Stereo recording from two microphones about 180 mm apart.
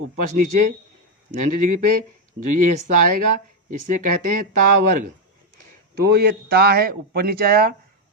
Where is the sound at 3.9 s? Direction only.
50° right (ahead or behind).